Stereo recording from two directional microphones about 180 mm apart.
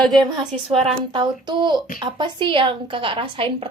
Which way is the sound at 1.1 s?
25° right (ahead or behind).